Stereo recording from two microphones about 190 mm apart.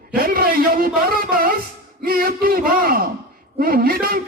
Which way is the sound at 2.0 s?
50° right (ahead or behind).